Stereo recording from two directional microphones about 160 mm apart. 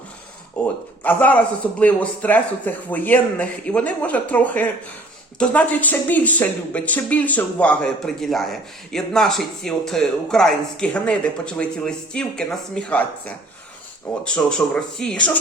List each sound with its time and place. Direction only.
0.6 s a sound: 10° left (ahead or behind)
1.0 s speech: 10° left (ahead or behind)
14.3 s speech: 5° left (ahead or behind)